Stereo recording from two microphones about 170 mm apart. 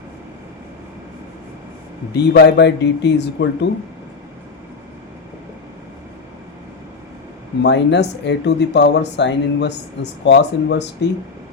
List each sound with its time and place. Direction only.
2.1 s speech: 85° left
7.6 s speech: 90° left